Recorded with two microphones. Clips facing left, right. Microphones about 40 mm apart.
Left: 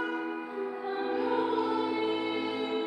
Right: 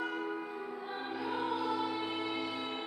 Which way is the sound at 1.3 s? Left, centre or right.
Centre.